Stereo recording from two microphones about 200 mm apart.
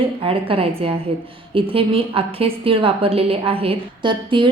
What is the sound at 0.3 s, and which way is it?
A woman's voice, 30° right (ahead or behind).